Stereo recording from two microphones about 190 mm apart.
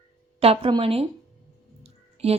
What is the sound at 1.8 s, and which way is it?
Clicking, 30° right (ahead or behind).